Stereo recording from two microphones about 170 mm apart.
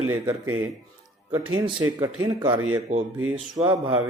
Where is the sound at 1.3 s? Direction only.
30° right (ahead or behind).